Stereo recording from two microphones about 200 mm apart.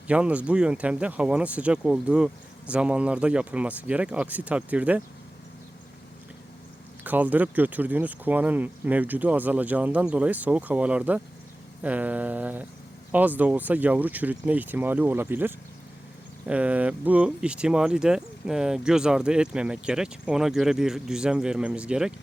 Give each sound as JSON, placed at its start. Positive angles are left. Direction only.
{"t": 0.1, "sound": "speech", "side_deg": -5}
{"t": 7.0, "sound": "speech", "side_deg": -10}